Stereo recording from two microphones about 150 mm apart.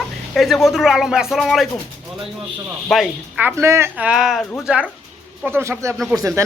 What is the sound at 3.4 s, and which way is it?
Speech, 15° right (ahead or behind).